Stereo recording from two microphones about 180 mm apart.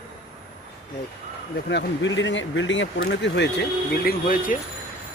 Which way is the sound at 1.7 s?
80° left.